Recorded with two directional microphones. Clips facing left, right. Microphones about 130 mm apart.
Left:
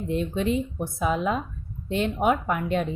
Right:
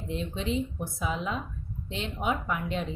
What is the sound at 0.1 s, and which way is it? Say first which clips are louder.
A woman's voice: left 6 dB; 55° left (ahead or behind).